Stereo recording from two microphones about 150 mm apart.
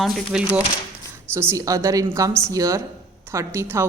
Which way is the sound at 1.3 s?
20° right (ahead or behind).